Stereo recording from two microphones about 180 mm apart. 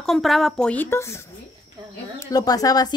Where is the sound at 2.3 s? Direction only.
20° left (ahead or behind).